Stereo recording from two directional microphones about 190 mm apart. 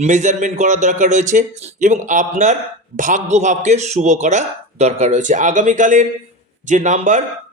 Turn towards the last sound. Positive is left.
turn(degrees=-40)  # may be behind; listen again after turning